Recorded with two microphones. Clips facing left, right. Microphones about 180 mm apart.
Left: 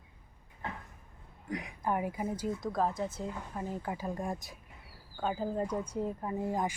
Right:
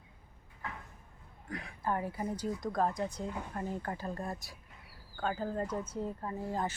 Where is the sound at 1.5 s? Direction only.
20° left (ahead or behind).